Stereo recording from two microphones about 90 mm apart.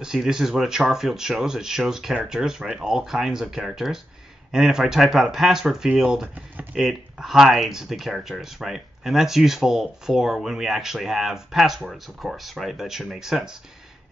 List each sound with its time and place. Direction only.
0.0 s speech: 5° right (ahead or behind)
6.2 s speech: 20° right (ahead or behind)
6.8 s speech: 5° right (ahead or behind)